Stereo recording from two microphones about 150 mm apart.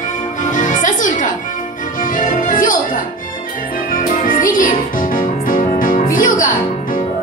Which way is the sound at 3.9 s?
60° left (ahead or behind).